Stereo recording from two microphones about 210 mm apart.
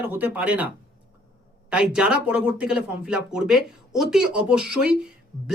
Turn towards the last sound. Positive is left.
turn(degrees=-5)  # may be behind; listen again after turning